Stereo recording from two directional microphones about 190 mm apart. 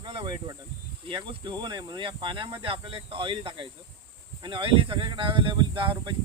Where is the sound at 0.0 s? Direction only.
25° right (ahead or behind).